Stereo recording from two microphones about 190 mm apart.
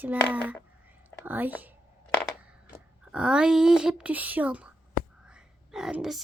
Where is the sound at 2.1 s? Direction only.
5° left (ahead or behind).